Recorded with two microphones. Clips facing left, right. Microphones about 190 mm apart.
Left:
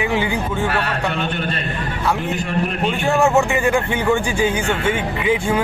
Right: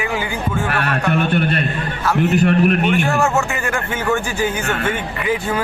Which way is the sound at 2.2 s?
65° right (ahead or behind).